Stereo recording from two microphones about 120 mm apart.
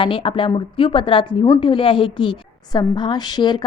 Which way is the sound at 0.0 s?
45° left (ahead or behind).